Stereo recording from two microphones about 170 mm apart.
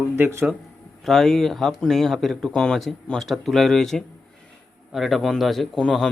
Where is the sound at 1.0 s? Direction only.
5° left (ahead or behind).